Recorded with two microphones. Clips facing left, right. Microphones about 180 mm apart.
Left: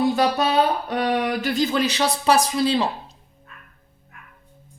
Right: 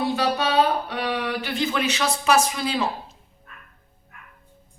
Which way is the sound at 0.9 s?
45° left (ahead or behind).